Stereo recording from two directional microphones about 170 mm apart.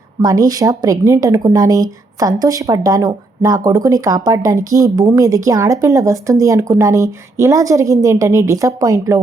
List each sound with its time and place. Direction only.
0.2 s speech: 20° right (ahead or behind)